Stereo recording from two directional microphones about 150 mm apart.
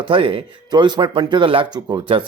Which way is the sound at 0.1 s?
35° right (ahead or behind).